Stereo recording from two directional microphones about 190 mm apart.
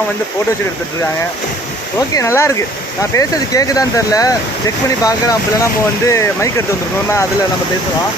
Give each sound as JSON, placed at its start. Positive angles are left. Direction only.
{"t": 2.1, "sound": "speech", "side_deg": 15}